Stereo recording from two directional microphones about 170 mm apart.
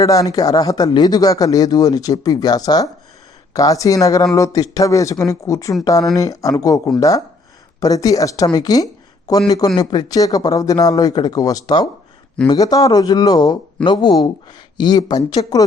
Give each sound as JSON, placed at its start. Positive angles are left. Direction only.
{"t": 0.0, "sound": "speech", "side_deg": 20}